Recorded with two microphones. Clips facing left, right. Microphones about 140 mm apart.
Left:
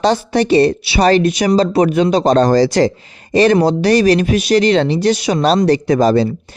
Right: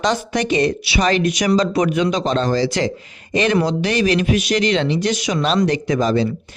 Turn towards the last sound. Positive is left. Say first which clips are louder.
# left 5 dB
turn(degrees=40)  # may be behind; listen again after turning